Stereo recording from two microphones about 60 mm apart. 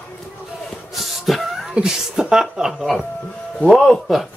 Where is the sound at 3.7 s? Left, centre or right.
Centre.